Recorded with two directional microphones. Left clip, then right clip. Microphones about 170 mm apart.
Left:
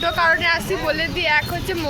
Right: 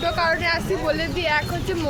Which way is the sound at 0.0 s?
5° left (ahead or behind).